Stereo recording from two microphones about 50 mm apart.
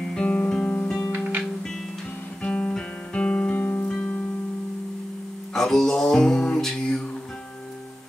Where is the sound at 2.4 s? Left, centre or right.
Centre.